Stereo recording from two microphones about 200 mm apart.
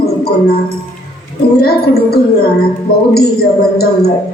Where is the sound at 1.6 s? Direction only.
50° left (ahead or behind).